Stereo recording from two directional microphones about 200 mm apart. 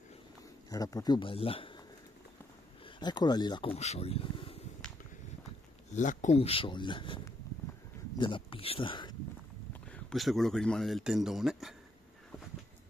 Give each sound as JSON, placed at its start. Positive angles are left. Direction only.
{"t": 0.7, "sound": "speech", "side_deg": 15}
{"t": 3.0, "sound": "speech", "side_deg": 20}
{"t": 5.9, "sound": "speech", "side_deg": 35}
{"t": 9.7, "sound": "speech", "side_deg": 5}